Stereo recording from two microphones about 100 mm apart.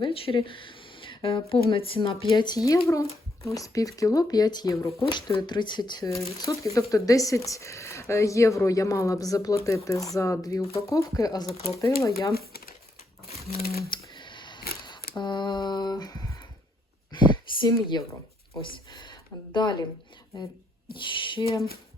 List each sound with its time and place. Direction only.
0.0 s speech: 65° left (ahead or behind); by 5.1 s 30° left (ahead or behind)
5.4 s speech: 50° left (ahead or behind)
6.2 s speech: 30° left (ahead or behind)
14.1 s camera: 50° left (ahead or behind)
17.1 s a sound: 50° left (ahead or behind)
18.6 s speech: 50° left (ahead or behind)